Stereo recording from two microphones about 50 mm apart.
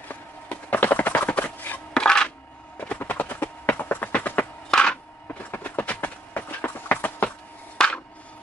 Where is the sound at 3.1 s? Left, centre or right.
Left.